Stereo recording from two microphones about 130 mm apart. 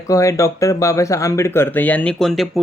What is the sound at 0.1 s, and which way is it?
Speech, 25° left (ahead or behind).